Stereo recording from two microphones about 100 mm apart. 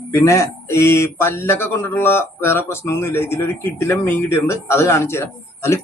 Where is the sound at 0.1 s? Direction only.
30° left (ahead or behind).